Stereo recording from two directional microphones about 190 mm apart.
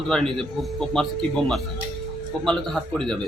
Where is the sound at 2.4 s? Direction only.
5° left (ahead or behind).